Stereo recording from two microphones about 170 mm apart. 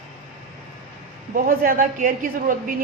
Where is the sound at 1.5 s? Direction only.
55° right (ahead or behind).